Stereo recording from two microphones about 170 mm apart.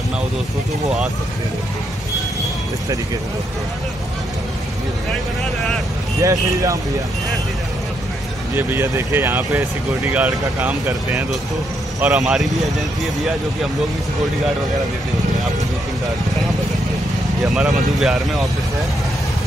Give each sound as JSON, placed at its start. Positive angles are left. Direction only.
{"t": 6.2, "sound": "speech", "side_deg": -20}
{"t": 8.5, "sound": "speech", "side_deg": -15}
{"t": 17.4, "sound": "speech", "side_deg": 0}